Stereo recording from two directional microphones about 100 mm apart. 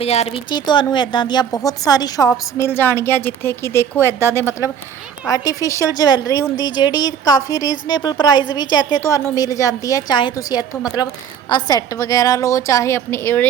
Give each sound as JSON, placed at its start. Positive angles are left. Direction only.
{"t": 0.0, "sound": "speech", "side_deg": 85}
{"t": 0.5, "sound": "a woman's voice", "side_deg": 50}
{"t": 2.6, "sound": "speech", "side_deg": 20}
{"t": 5.3, "sound": "a woman's voice", "side_deg": 35}
{"t": 6.7, "sound": "a woman's voice", "side_deg": 45}
{"t": 11.9, "sound": "a woman's voice", "side_deg": 35}